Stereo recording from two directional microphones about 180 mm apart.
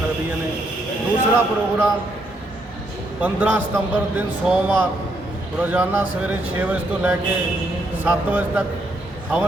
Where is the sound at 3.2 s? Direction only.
10° right (ahead or behind).